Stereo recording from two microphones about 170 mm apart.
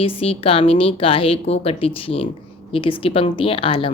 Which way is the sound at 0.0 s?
35° left (ahead or behind).